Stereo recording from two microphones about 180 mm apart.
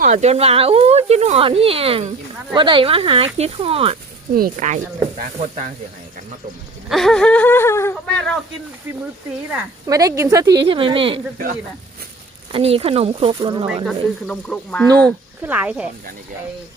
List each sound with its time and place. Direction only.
0.0 s speech: 40° right (ahead or behind)
4.4 s speech: 45° right (ahead or behind)
6.8 s whimper: centre (ahead or behind)
9.5 s speech: 20° right (ahead or behind)
12.5 s speech: 30° right (ahead or behind)
13.8 s speech: 5° left (ahead or behind)
15.4 s speech: 10° right (ahead or behind)